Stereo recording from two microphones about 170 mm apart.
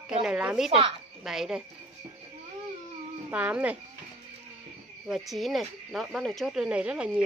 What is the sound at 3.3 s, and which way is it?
Speech, 10° right (ahead or behind).